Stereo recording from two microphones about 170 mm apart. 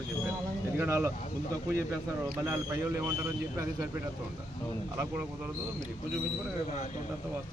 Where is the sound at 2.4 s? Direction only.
15° right (ahead or behind).